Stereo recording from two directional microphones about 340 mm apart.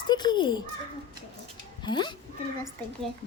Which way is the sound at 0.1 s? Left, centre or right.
Centre.